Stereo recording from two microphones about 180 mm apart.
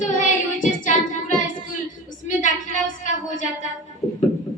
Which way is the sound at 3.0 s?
45° left (ahead or behind).